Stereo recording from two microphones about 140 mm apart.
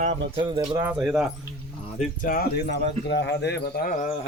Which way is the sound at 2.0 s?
80° left.